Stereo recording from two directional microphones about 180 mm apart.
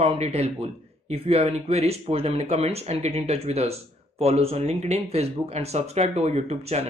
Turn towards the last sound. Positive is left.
turn(degrees=-35)  # may be behind; listen again after turning